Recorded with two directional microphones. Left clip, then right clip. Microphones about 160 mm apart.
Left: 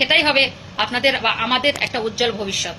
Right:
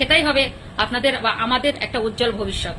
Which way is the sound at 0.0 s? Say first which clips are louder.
Left 2 dB; 15° right (ahead or behind).